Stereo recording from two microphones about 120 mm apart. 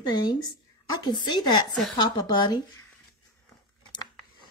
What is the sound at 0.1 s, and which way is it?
Speech, 35° left (ahead or behind).